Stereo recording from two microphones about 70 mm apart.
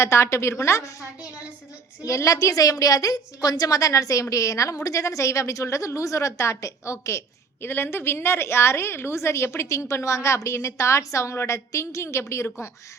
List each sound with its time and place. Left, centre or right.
0.0 s a woman's voice: left
2.0 s a woman's voice: left
7.6 s a woman's voice: left